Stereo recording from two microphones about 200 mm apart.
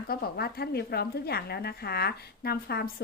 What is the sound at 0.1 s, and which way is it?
A woman's voice, 50° left (ahead or behind).